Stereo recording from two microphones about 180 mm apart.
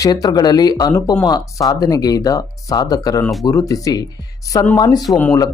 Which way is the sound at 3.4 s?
20° left (ahead or behind).